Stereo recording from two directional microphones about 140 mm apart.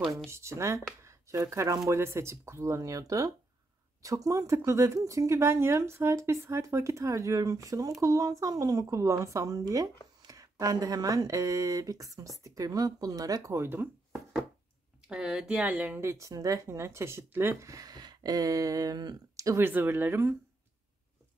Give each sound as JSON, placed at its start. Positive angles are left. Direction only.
{"t": 0.3, "sound": "speech", "side_deg": -20}
{"t": 1.0, "sound": "a sound", "side_deg": -20}
{"t": 1.9, "sound": "speech", "side_deg": -20}
{"t": 15.0, "sound": "speech", "side_deg": -5}